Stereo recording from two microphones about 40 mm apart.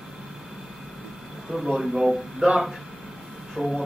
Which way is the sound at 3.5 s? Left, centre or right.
Centre.